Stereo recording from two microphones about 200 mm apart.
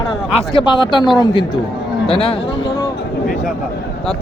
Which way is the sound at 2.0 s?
30° left (ahead or behind).